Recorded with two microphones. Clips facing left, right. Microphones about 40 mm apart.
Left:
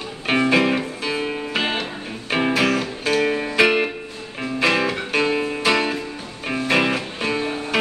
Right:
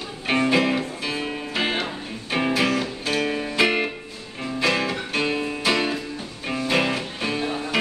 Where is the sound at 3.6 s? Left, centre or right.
Centre.